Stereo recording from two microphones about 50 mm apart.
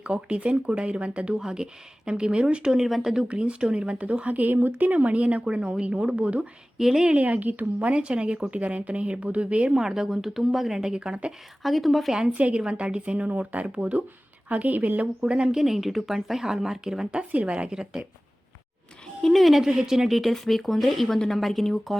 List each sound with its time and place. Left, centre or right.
0.0 s speech: right
2.8 s speech: centre
3.2 s speech: right
6.7 s speech: centre
7.1 s speech: right
9.7 s speech: centre
11.3 s speech: centre
12.3 s a woman's voice: right
15.2 s speech: centre
15.6 s speech: centre
19.2 s speech: centre